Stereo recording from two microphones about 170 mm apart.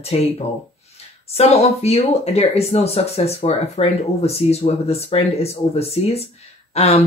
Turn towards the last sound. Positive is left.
turn(degrees=35)  # may be behind; listen again after turning